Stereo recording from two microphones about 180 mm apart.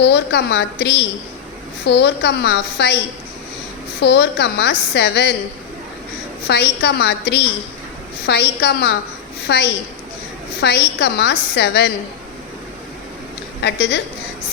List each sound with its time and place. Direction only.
0.0 s a woman's voice: 70° left (ahead or behind)
4.0 s a woman's voice: 70° left (ahead or behind)
6.5 s a woman's voice: 65° left (ahead or behind)
13.6 s a woman's voice: 70° left (ahead or behind)